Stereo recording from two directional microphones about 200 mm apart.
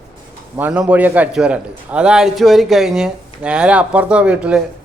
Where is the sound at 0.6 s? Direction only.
5° right (ahead or behind).